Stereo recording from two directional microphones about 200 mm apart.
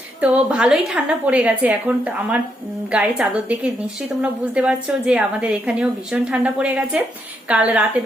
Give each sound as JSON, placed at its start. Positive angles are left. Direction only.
{"t": 0.2, "sound": "a woman's voice", "side_deg": -5}